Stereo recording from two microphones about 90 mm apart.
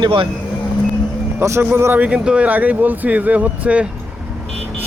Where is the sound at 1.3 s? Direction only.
30° right (ahead or behind).